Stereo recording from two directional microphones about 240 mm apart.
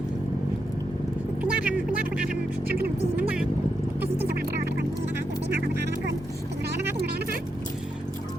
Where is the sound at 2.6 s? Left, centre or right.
Right.